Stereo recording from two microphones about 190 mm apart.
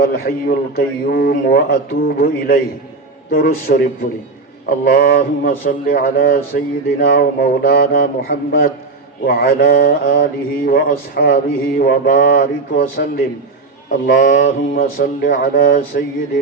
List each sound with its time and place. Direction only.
0.0 s mantra: 50° left (ahead or behind)